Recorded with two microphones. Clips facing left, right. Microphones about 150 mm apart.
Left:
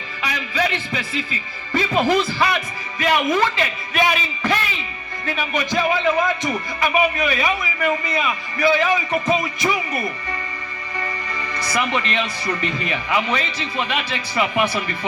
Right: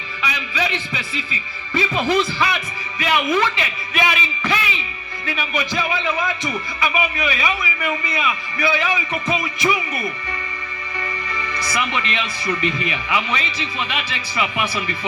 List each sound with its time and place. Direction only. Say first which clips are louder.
0.2 s a man's voice: left 2 dB; 45° left (ahead or behind)